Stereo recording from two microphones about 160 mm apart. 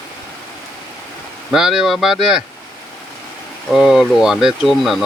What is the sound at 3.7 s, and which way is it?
Speech, centre (ahead or behind).